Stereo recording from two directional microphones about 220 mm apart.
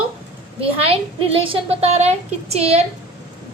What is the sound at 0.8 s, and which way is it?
A woman's voice, 25° right (ahead or behind).